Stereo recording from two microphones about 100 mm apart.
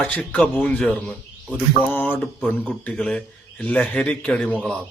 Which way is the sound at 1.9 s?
20° left (ahead or behind).